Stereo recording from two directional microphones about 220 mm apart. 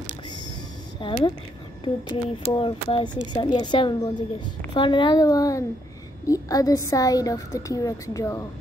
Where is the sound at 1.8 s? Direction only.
25° left (ahead or behind).